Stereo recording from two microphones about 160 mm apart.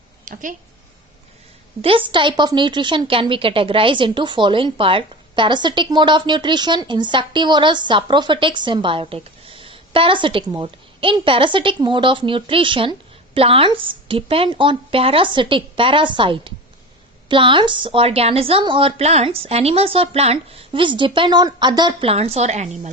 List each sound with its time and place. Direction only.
0.3 s a woman's voice: 55° right (ahead or behind)
1.8 s a woman's voice: 35° right (ahead or behind)